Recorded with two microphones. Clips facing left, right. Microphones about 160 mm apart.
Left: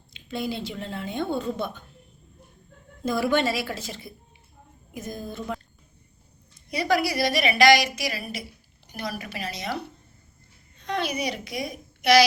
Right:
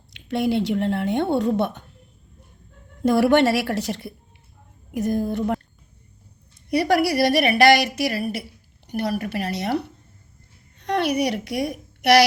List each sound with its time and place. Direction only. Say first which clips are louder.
0.1 s speech: right 8 dB; 70° right (ahead or behind)
3.0 s speech: right 7 dB; 70° right (ahead or behind)
6.7 s a woman's voice: right 5 dB; 65° right (ahead or behind)